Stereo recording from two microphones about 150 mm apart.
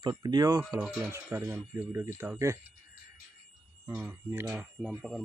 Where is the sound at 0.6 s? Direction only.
5° right (ahead or behind); by 2.6 s 20° right (ahead or behind).